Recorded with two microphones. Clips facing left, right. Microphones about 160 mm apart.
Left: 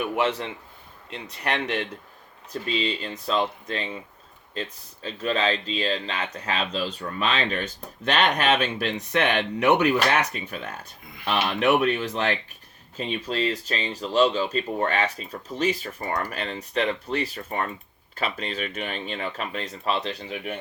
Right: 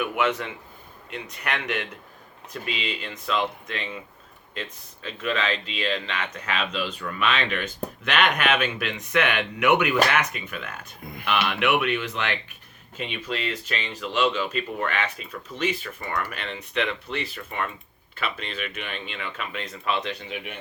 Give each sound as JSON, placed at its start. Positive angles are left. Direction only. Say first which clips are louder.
{"t": 0.0, "sound": "speech", "louder": "even", "side_deg": 30}
{"t": 5.0, "sound": "speech", "louder": "left 2 dB", "side_deg": 35}